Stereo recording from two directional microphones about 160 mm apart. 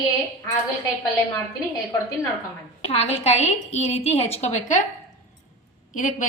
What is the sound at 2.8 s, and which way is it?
A woman's voice, 40° left (ahead or behind).